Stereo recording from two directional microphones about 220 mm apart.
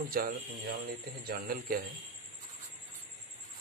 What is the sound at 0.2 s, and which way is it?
A man's voice, 40° right (ahead or behind).